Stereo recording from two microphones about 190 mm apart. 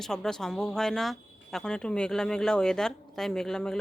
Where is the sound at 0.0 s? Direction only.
5° left (ahead or behind).